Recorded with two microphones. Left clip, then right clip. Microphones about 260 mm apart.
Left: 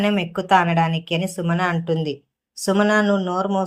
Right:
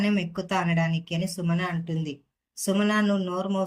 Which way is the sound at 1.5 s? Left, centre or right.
Centre.